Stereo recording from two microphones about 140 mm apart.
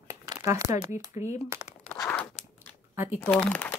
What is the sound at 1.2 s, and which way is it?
Speech, 55° left (ahead or behind).